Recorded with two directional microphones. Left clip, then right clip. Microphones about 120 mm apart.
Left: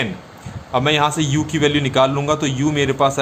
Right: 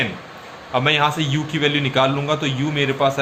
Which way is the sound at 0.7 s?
50° left (ahead or behind).